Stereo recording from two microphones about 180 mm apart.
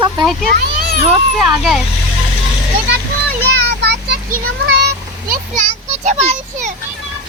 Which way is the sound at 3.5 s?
70° right (ahead or behind).